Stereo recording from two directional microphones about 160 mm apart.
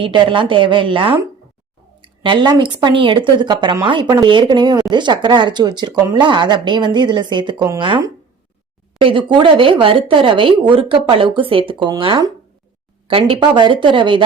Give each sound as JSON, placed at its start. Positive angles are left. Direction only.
{"t": 0.0, "sound": "speech", "side_deg": -30}